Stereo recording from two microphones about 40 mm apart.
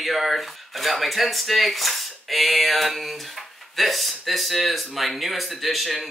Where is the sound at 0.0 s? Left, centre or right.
Centre.